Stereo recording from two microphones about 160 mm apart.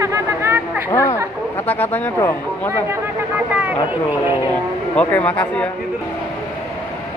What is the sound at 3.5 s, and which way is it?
Speech, 10° right (ahead or behind).